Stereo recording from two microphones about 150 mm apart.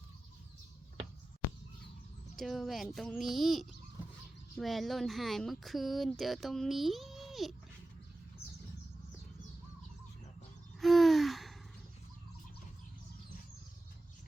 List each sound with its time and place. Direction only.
2.3 s speech: centre (ahead or behind)
10.8 s gasp: centre (ahead or behind)